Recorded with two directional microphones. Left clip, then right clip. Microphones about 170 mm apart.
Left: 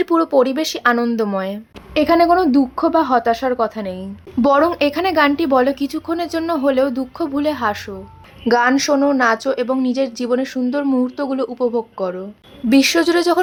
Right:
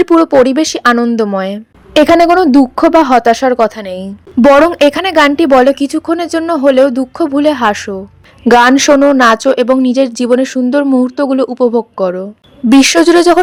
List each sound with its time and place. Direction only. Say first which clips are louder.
0.0 s a woman's voice: right 8 dB; 40° right (ahead or behind)
8.4 s a woman's voice: right 9 dB; 55° right (ahead or behind)